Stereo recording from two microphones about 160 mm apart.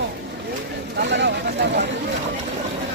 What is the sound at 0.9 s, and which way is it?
Speech, 90° right.